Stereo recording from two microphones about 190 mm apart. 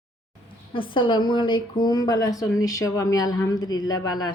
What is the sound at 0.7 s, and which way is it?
A woman's voice, 25° left (ahead or behind).